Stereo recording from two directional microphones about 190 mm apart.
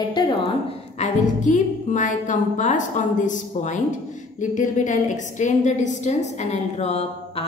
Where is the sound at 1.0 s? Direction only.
40° left (ahead or behind).